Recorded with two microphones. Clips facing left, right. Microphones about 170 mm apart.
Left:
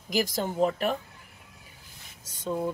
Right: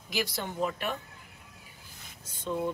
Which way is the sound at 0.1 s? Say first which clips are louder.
Left 6 dB; 45° left (ahead or behind).